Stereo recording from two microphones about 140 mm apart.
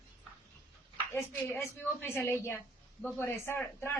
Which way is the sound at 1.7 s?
15° left (ahead or behind).